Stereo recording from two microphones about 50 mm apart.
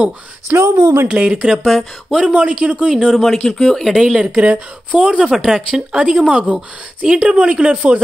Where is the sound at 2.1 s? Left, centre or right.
Right.